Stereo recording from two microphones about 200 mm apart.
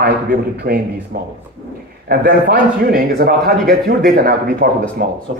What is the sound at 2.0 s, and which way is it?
A man's voice, 50° right (ahead or behind).